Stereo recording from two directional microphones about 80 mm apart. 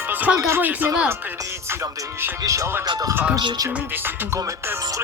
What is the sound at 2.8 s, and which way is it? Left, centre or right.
Speech, right.